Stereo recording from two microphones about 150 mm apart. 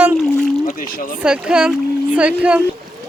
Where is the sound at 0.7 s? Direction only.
70° left (ahead or behind).